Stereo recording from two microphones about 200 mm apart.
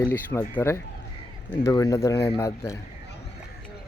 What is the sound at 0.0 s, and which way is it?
Speech, 10° left (ahead or behind).